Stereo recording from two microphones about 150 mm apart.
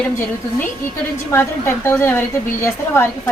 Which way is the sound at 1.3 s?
15° left (ahead or behind).